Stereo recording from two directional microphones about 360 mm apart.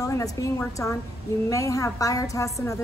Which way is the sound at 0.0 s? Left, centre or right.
Centre.